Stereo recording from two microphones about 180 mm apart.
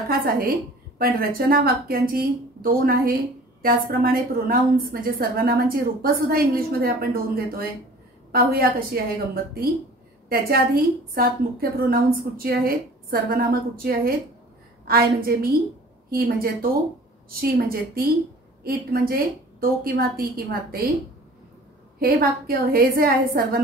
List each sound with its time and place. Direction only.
0.1 s a woman's voice: 55° right (ahead or behind)
22.0 s a woman's voice: 55° right (ahead or behind)